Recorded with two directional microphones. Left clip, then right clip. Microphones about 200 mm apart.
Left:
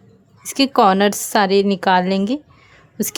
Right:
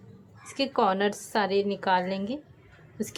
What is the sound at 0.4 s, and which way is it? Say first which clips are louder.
A woman's voice: left 11 dB; 60° left (ahead or behind).